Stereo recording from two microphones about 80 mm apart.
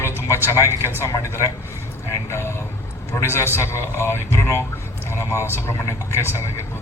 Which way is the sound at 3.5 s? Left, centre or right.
Left.